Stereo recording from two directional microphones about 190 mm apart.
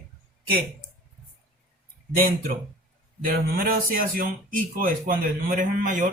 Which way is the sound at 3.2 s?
50° right (ahead or behind).